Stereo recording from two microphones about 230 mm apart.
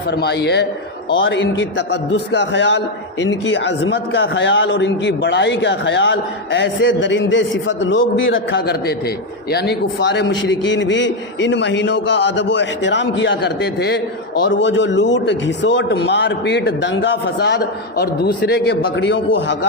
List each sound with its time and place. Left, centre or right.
0.1 s a man's voice: left